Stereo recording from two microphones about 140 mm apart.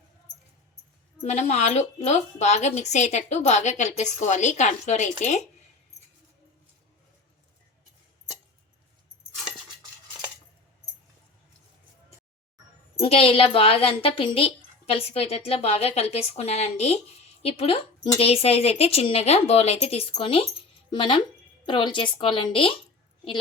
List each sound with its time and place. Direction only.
1.2 s a woman's voice: 55° left (ahead or behind)
13.0 s a woman's voice: 45° left (ahead or behind)